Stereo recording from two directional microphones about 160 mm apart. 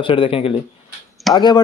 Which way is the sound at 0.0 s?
35° left (ahead or behind).